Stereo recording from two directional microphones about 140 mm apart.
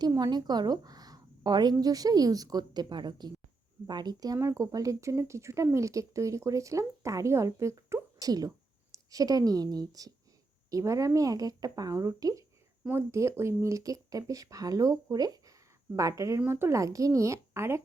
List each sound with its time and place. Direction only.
0.0 s speech: 30° right (ahead or behind)